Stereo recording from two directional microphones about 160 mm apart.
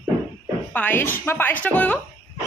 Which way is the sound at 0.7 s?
10° left (ahead or behind).